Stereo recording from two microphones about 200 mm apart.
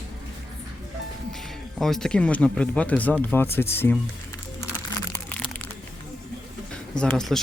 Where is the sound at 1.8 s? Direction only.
Centre (ahead or behind).